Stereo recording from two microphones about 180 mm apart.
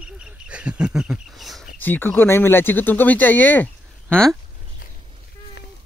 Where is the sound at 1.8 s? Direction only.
10° left (ahead or behind).